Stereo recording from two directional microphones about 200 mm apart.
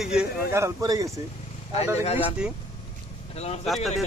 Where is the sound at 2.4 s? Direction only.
5° right (ahead or behind).